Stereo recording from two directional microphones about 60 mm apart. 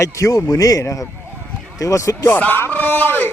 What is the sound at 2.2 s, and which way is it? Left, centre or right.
Speech, left.